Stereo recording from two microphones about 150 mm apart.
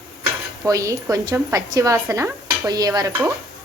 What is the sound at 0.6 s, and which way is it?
A woman's voice, 20° right (ahead or behind).